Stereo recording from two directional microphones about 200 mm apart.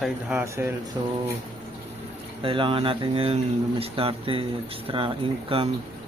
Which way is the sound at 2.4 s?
25° right (ahead or behind).